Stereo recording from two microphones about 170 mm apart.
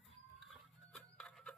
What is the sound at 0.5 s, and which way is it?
Music, 5° left (ahead or behind).